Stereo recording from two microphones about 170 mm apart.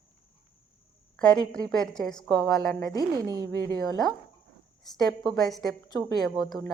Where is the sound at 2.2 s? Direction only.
20° left (ahead or behind).